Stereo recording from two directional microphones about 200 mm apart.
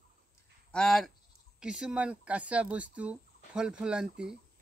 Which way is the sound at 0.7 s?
5° left (ahead or behind).